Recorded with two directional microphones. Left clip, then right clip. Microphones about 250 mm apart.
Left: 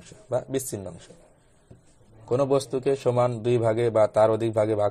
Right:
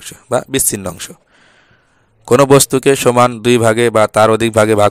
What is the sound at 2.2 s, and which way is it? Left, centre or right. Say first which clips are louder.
A man's voice: right 15 dB; right.